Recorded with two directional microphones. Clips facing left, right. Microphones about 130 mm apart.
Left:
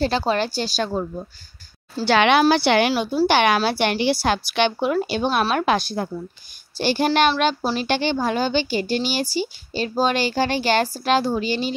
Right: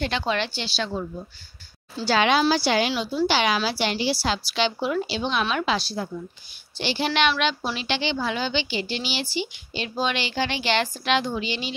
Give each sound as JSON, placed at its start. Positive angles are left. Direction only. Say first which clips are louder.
{"t": 0.0, "sound": "a woman's voice", "louder": "left 5 dB", "side_deg": 35}
{"t": 2.0, "sound": "a woman's voice", "louder": "left 4 dB", "side_deg": 65}
{"t": 2.9, "sound": "a woman's voice", "louder": "left 4 dB", "side_deg": 45}